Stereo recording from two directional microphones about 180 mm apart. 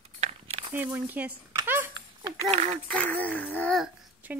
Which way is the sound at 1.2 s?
10° right (ahead or behind).